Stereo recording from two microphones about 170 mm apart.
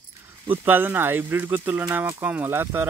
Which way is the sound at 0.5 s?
10° right (ahead or behind).